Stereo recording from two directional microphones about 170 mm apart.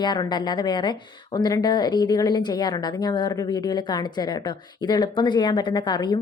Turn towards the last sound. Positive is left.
turn(degrees=25)  # may be behind; listen again after turning